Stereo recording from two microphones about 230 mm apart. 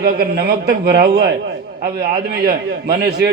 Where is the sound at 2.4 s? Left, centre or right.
Right.